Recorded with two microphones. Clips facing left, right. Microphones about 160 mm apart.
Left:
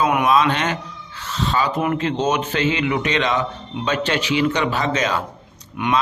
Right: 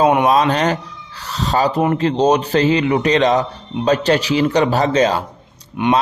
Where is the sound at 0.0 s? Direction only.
30° right (ahead or behind).